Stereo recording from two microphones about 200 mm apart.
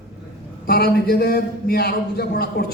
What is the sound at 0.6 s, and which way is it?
A man's voice, 50° left (ahead or behind).